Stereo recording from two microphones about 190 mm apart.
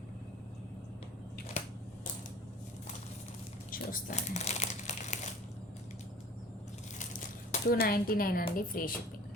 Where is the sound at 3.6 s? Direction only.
50° left (ahead or behind).